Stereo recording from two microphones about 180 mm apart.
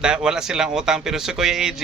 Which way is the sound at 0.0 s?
5° right (ahead or behind).